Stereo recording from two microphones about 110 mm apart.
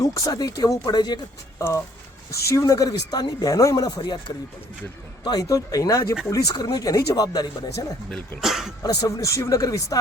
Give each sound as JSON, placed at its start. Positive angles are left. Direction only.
{"t": 0.0, "sound": "speech", "side_deg": 35}
{"t": 2.3, "sound": "speech", "side_deg": 30}
{"t": 5.2, "sound": "speech", "side_deg": 35}
{"t": 8.4, "sound": "speech", "side_deg": -5}
{"t": 8.8, "sound": "speech", "side_deg": 35}